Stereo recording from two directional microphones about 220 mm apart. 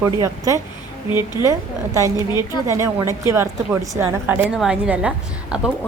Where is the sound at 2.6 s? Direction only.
15° right (ahead or behind).